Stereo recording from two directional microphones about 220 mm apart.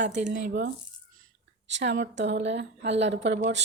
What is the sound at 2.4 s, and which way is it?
Speech, 50° right (ahead or behind).